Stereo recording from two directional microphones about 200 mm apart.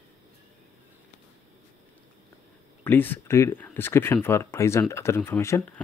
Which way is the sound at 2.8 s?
10° left (ahead or behind).